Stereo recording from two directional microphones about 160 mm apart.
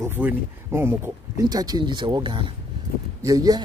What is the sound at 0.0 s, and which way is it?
Speech, 10° right (ahead or behind).